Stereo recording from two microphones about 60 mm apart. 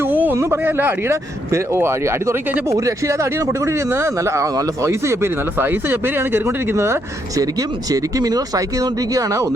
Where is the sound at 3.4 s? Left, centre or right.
Right.